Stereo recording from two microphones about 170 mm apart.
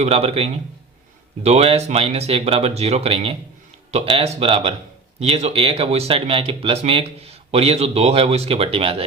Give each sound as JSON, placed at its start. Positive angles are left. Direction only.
{"t": 0.0, "sound": "speech", "side_deg": -35}